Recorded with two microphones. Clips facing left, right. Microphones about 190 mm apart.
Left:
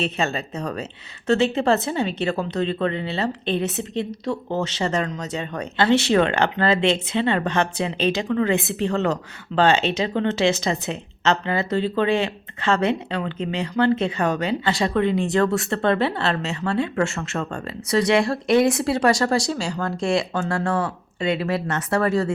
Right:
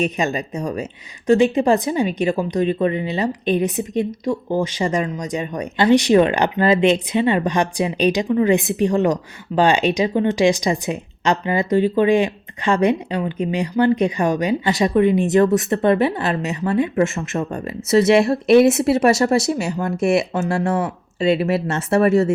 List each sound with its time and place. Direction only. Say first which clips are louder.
0.0 s speech: right 4 dB; 15° right (ahead or behind)